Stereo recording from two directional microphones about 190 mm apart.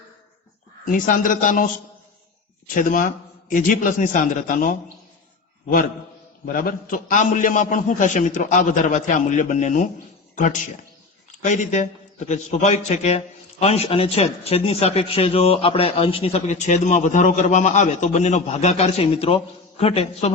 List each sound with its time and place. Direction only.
0.9 s a man's voice: 45° left (ahead or behind)
2.7 s a man's voice: 45° left (ahead or behind)
6.5 s a man's voice: 50° left (ahead or behind)